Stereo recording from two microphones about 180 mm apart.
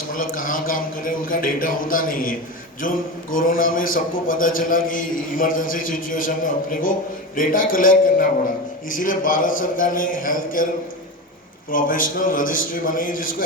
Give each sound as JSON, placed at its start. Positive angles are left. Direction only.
{"t": 0.1, "sound": "a man's voice", "side_deg": 50}
{"t": 11.7, "sound": "a man's voice", "side_deg": 50}